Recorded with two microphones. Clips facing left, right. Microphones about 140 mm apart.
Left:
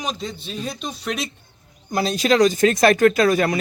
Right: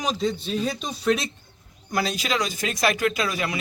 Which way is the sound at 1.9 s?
25° left (ahead or behind).